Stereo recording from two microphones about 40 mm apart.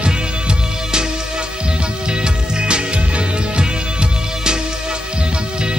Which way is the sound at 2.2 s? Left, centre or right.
Right.